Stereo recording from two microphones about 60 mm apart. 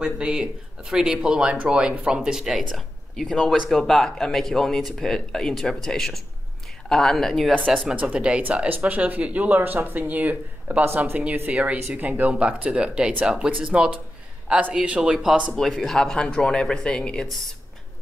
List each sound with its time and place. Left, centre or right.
0.0 s speech: centre
7.8 s speech: right
15.5 s speech: centre